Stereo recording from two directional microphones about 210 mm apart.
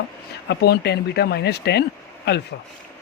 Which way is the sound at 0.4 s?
50° left (ahead or behind).